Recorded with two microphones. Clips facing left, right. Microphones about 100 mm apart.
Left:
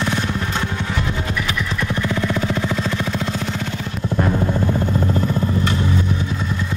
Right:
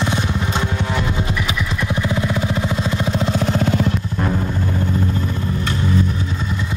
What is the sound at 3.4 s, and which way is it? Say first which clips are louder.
Vehicle: right 7 dB; 50° right (ahead or behind).